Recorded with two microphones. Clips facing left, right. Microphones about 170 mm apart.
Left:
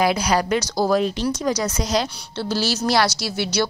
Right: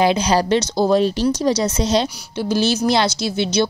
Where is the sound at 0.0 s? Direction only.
25° right (ahead or behind).